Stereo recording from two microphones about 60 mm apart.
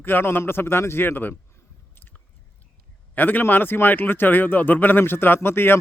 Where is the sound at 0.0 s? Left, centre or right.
Left.